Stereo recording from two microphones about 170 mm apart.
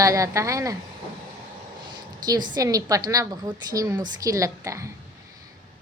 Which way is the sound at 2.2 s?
25° right (ahead or behind).